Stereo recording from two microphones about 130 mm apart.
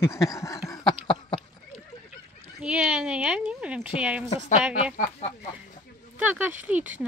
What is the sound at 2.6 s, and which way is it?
Speech, 5° right (ahead or behind).